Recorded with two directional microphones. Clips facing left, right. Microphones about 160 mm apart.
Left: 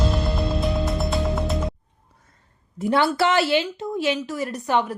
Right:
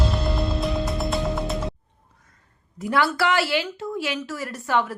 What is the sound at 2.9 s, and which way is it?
A woman's voice, 25° left (ahead or behind).